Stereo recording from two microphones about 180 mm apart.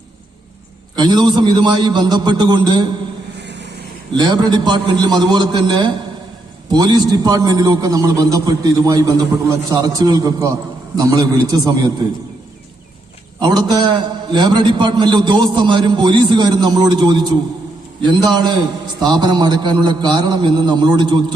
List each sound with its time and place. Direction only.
0.9 s a man's voice: 25° right (ahead or behind)
3.4 s vehicle: 70° right (ahead or behind)
4.1 s a man's voice: 25° right (ahead or behind)
13.4 s a man's voice: 25° right (ahead or behind)